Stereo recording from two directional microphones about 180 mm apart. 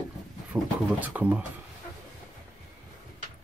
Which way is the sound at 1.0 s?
10° right (ahead or behind).